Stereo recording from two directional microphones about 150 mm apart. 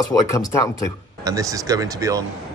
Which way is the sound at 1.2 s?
20° right (ahead or behind).